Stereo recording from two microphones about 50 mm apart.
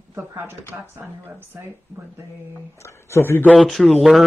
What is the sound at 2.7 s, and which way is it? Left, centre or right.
Speech, left.